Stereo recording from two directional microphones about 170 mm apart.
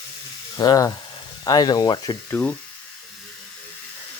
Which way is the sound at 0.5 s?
20° left (ahead or behind).